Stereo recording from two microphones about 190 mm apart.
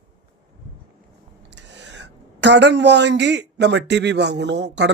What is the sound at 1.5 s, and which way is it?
Speech, 65° right (ahead or behind).